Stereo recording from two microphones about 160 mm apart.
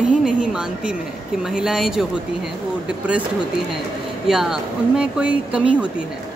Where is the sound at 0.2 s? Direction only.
5° right (ahead or behind).